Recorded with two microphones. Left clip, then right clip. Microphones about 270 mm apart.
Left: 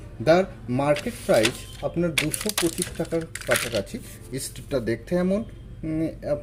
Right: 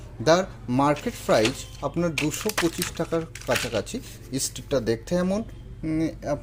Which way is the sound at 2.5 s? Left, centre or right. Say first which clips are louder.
Right 1 dB; right.